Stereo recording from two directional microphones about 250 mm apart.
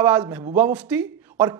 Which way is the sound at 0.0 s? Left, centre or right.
Centre.